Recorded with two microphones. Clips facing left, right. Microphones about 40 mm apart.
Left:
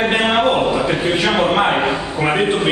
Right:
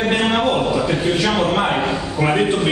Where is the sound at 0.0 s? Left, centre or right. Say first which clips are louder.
Left 2 dB; left.